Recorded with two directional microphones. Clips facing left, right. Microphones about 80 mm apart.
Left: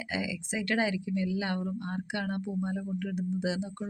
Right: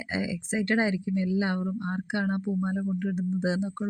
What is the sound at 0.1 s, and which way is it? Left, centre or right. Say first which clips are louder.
Speech: right 4 dB; right.